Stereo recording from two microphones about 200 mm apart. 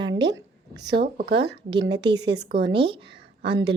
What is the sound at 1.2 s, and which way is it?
Speech, 55° right (ahead or behind).